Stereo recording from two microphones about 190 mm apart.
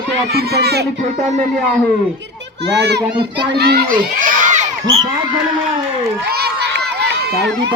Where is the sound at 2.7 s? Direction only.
65° right (ahead or behind).